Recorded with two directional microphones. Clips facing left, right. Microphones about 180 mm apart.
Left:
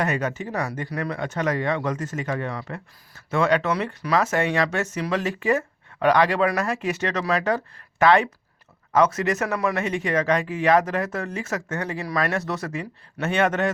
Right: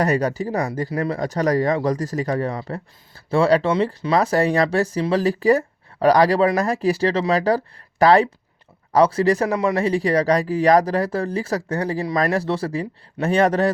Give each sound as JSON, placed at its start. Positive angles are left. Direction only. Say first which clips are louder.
{"t": 0.0, "sound": "speech", "louder": "right 5 dB", "side_deg": -35}